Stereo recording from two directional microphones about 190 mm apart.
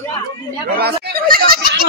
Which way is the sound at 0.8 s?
50° right (ahead or behind).